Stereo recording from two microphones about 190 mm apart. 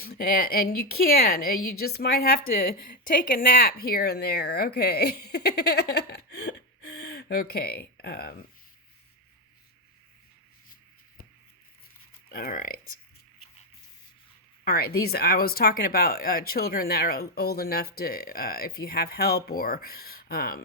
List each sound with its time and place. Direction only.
0.0 s a woman's voice: 50° left (ahead or behind)
12.3 s speech: 50° left (ahead or behind)
14.6 s speech: 55° left (ahead or behind)